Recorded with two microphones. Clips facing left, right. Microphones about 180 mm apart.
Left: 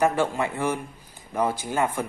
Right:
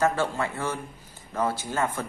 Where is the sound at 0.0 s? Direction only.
15° left (ahead or behind).